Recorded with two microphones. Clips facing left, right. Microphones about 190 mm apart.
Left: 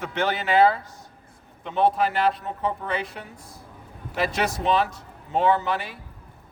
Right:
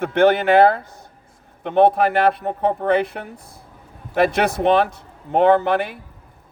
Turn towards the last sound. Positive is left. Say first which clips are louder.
# right 7 dB
turn(degrees=-55)  # may be behind; listen again after turning